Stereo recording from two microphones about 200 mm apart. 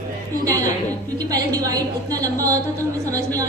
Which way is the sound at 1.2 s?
20° right (ahead or behind).